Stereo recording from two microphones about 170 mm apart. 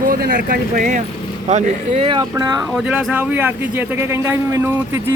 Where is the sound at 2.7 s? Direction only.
5° right (ahead or behind).